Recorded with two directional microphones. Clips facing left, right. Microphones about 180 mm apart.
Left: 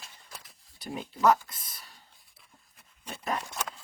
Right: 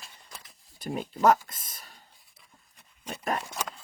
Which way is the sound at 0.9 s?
45° right (ahead or behind).